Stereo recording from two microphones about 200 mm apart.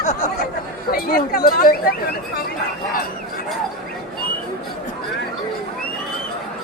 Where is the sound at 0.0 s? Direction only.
35° left (ahead or behind).